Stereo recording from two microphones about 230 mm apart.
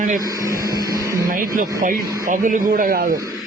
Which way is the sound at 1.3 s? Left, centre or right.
Right.